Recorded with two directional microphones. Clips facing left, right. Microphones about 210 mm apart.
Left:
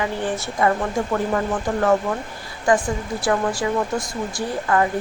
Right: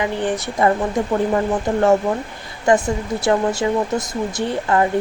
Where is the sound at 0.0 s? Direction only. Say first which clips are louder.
Right 3 dB; 20° right (ahead or behind).